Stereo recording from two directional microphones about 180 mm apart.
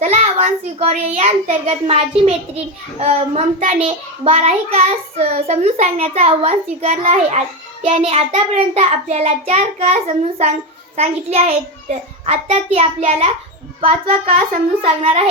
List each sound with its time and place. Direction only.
0.0 s child singing: 35° right (ahead or behind)
14.8 s child singing: 35° right (ahead or behind)